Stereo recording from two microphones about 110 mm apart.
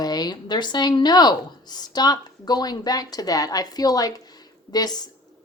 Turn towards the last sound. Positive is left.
turn(degrees=40)  # may be behind; listen again after turning